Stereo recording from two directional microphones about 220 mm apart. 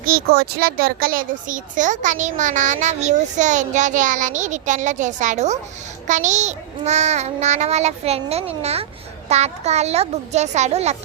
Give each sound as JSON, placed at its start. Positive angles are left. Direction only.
{"t": 0.0, "sound": "speech", "side_deg": -45}